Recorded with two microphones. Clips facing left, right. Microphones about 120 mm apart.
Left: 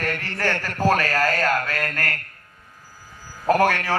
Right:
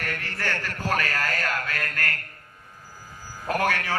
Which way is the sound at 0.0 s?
40° left (ahead or behind).